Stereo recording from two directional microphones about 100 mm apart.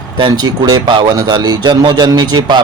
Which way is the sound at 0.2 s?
45° right (ahead or behind).